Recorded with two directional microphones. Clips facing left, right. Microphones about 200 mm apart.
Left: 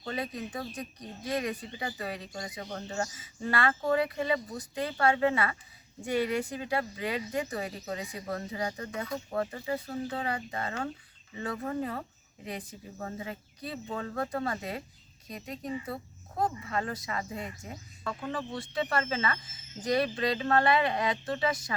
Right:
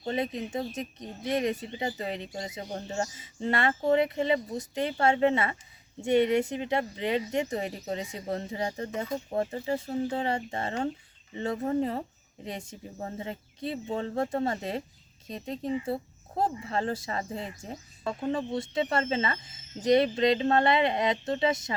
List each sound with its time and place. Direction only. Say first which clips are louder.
0.0 s speech: right 5 dB; 25° right (ahead or behind)